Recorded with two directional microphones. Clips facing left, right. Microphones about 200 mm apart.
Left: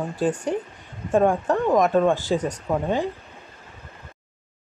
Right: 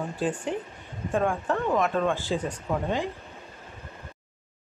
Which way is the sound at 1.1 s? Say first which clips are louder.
Left 6 dB; 40° left (ahead or behind).